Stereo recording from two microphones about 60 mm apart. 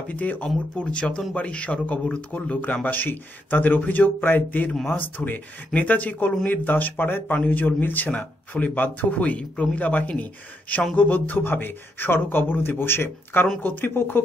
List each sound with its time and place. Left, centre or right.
0.1 s speech: left